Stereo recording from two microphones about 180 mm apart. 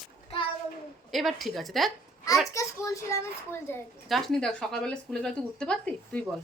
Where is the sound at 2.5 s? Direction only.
15° left (ahead or behind).